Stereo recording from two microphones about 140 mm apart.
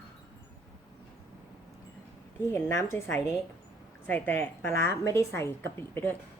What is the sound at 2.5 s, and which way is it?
A woman's voice, 20° left (ahead or behind).